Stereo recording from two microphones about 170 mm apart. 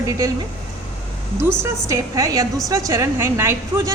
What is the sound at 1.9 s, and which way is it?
A woman's voice, 20° right (ahead or behind).